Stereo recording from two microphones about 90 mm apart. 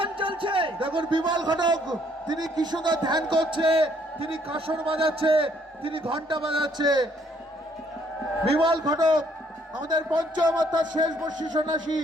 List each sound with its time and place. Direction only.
0.0 s a man's voice: 70° right (ahead or behind); by 7.1 s 55° right (ahead or behind)
8.6 s a man's voice: 50° right (ahead or behind)